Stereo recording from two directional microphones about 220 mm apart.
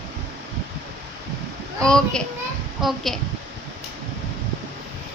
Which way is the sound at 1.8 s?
5° left (ahead or behind).